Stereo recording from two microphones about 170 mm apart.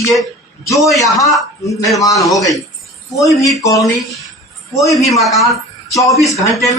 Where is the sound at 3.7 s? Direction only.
20° left (ahead or behind).